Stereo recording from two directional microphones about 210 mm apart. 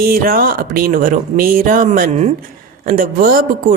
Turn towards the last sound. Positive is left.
turn(degrees=-40)  # may be behind; listen again after turning